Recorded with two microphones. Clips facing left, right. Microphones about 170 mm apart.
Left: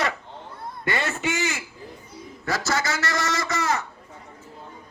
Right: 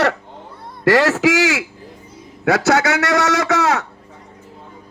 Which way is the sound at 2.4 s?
70° right (ahead or behind).